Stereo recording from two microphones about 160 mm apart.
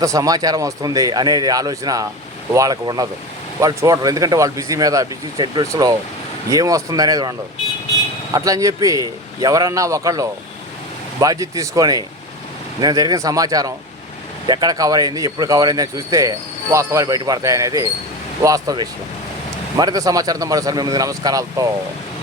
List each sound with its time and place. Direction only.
0.0 s speech: 20° right (ahead or behind)